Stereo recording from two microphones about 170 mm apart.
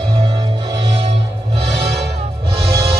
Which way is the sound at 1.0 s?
35° right (ahead or behind).